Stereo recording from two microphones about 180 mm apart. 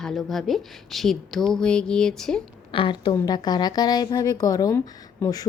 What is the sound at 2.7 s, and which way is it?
A woman's voice, 25° left (ahead or behind).